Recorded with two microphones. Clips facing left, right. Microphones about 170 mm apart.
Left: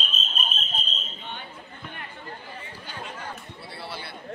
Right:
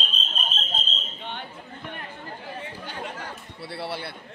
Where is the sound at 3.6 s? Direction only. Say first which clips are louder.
Right 7 dB; 70° right (ahead or behind).